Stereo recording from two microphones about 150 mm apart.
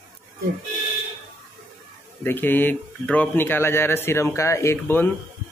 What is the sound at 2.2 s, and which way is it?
Speech, 15° left (ahead or behind).